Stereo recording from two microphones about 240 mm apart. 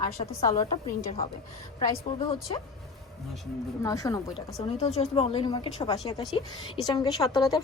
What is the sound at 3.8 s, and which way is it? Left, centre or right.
Speech, centre.